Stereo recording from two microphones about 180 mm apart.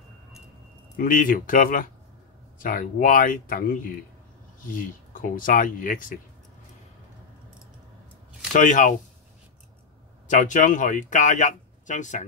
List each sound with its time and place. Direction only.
0.9 s speech: 50° left (ahead or behind)
8.5 s speech: 45° left (ahead or behind)
10.2 s speech: 45° left (ahead or behind)